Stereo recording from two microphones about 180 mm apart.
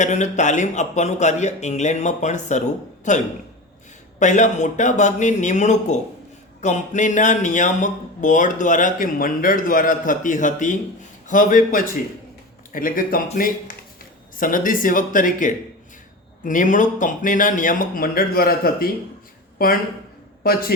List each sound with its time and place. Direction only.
0.0 s speech: 40° left (ahead or behind)
4.2 s a man's voice: 40° left (ahead or behind)